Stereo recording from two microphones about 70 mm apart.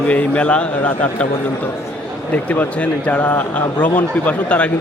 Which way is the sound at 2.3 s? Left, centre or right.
Left.